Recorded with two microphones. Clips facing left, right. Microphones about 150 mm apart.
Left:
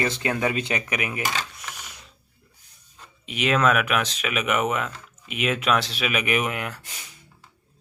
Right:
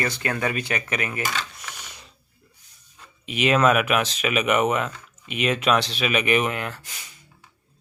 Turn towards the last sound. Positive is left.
turn(degrees=10)  # may be behind; listen again after turning